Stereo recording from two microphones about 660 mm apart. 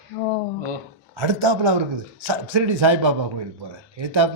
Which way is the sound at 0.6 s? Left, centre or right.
Right.